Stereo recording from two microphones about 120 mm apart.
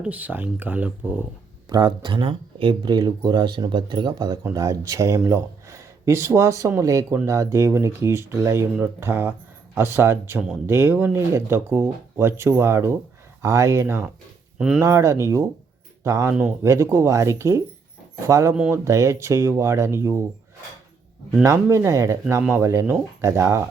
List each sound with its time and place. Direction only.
0.0 s speech: 15° right (ahead or behind)
1.7 s speech: 40° right (ahead or behind); by 20.2 s 25° right (ahead or behind)
21.4 s speech: 25° right (ahead or behind)